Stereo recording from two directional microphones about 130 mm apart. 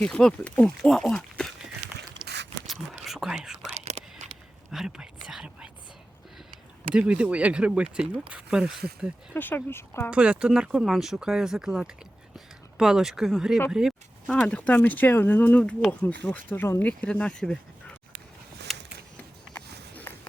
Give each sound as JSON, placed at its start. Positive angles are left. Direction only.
{"t": 0.0, "sound": "speech", "side_deg": 5}
{"t": 2.2, "sound": "a sound", "side_deg": -35}
{"t": 3.0, "sound": "whispering", "side_deg": 0}
{"t": 3.8, "sound": "whispering", "side_deg": -55}
{"t": 4.7, "sound": "whispering", "side_deg": -5}
{"t": 6.9, "sound": "speech", "side_deg": -10}
{"t": 9.3, "sound": "speech", "side_deg": 15}
{"t": 10.1, "sound": "speech", "side_deg": -10}
{"t": 14.3, "sound": "speech", "side_deg": 10}
{"t": 18.7, "sound": "a sound", "side_deg": 0}
{"t": 19.5, "sound": "a sound", "side_deg": 15}